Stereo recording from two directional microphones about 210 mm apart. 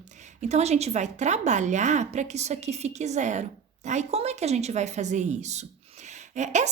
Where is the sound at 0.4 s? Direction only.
30° right (ahead or behind).